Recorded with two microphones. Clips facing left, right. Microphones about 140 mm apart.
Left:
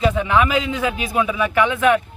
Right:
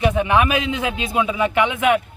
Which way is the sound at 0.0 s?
15° right (ahead or behind).